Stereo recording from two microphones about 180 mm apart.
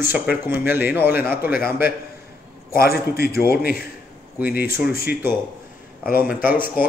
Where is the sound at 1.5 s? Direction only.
55° left (ahead or behind).